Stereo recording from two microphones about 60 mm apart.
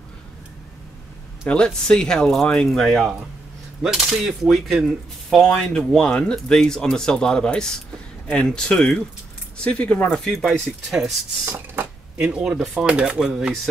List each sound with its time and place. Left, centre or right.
1.5 s speech: centre
3.8 s speech: centre
5.7 s speech: centre
10.1 s speech: centre
10.9 s speech: centre
11.5 s a sound: right
12.2 s speech: centre